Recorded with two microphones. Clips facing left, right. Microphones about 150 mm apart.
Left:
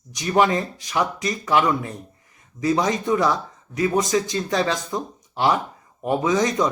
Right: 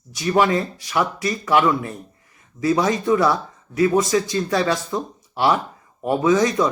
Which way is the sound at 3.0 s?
20° left (ahead or behind).